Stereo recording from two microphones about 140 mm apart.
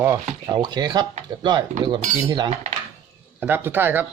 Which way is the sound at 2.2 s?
30° right (ahead or behind).